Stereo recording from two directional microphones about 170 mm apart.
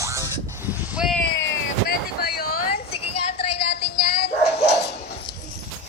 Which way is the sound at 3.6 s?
75° left (ahead or behind).